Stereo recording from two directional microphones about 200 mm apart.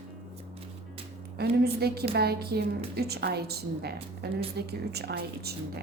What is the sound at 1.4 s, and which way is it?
A woman's voice, 55° right (ahead or behind).